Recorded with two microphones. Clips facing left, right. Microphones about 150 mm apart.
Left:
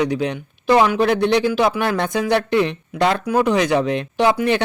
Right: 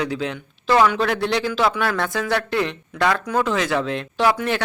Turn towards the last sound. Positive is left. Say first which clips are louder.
# left 3 dB
turn(degrees=20)  # may be behind; listen again after turning